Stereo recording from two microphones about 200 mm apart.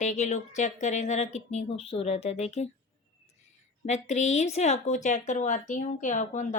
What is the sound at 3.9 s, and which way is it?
Speech, 35° left (ahead or behind).